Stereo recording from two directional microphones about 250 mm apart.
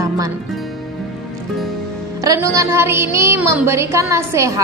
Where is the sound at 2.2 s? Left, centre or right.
Centre.